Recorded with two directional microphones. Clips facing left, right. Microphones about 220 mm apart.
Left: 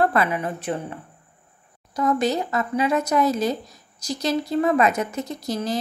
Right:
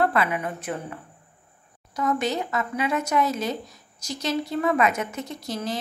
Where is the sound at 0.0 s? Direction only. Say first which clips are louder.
Left 2 dB; 40° left (ahead or behind).